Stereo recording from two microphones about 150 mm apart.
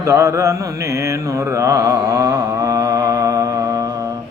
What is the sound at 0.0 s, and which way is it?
Mantra, 20° right (ahead or behind).